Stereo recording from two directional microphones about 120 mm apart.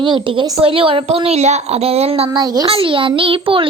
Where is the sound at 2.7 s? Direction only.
50° right (ahead or behind).